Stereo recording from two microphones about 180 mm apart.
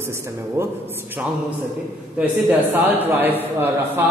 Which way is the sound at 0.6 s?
15° right (ahead or behind).